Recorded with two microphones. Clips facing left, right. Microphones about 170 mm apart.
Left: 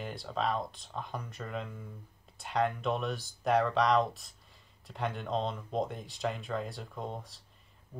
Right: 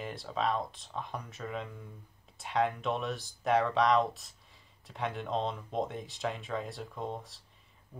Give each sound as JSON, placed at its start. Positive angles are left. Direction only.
{"t": 0.0, "sound": "speech", "side_deg": 0}